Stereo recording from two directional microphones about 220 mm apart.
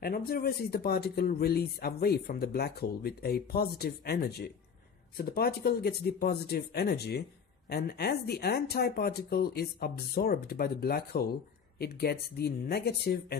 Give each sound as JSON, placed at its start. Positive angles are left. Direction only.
{"t": 0.0, "sound": "speech", "side_deg": 40}